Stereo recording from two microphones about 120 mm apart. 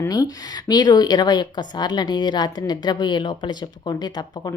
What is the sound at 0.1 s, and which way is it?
A woman's voice, 35° left (ahead or behind).